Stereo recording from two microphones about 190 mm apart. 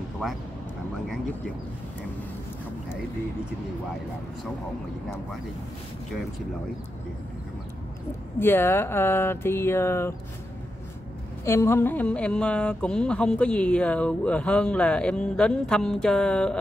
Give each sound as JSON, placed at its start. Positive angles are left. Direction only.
{"t": 8.4, "sound": "speech", "side_deg": 10}
{"t": 11.4, "sound": "speech", "side_deg": 15}